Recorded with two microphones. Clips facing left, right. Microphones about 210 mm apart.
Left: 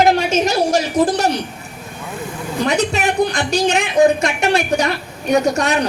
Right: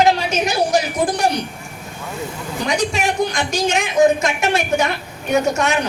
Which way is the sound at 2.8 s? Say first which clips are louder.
Left 1 dB; 40° left (ahead or behind).